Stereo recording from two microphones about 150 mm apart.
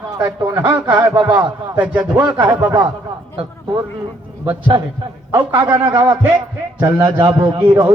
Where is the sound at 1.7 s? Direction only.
10° right (ahead or behind).